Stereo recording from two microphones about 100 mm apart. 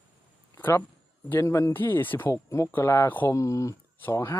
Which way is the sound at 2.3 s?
30° left (ahead or behind).